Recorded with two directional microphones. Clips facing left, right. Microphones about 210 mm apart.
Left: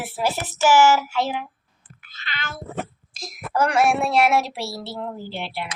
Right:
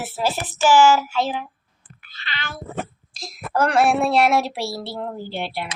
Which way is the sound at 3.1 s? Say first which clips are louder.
Right 1 dB; 20° left (ahead or behind).